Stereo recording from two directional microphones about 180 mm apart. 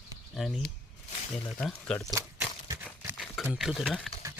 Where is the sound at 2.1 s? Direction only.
15° right (ahead or behind).